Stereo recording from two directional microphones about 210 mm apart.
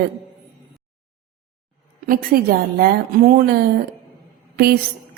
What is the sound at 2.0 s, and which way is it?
A woman's voice, 45° right (ahead or behind).